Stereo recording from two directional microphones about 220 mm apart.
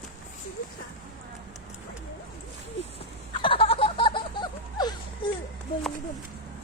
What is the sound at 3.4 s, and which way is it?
Laughter, 25° left (ahead or behind).